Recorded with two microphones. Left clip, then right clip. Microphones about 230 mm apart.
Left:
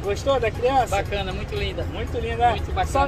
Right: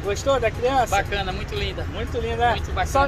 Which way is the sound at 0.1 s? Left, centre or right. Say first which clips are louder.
Right 1 dB; centre.